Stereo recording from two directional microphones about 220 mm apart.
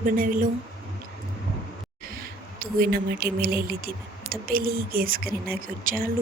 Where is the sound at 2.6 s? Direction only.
45° right (ahead or behind).